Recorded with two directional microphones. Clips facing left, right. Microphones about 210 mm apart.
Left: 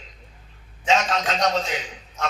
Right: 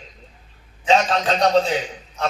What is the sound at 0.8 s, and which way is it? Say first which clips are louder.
Speech: right 4 dB; 35° right (ahead or behind).